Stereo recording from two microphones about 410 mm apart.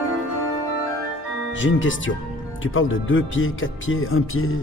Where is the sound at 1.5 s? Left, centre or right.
Left.